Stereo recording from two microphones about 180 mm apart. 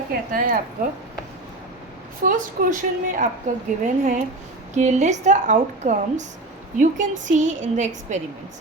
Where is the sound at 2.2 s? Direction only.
50° right (ahead or behind).